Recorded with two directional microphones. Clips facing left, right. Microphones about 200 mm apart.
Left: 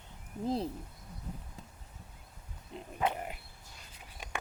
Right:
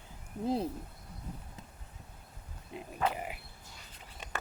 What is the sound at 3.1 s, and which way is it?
Speech, 5° right (ahead or behind).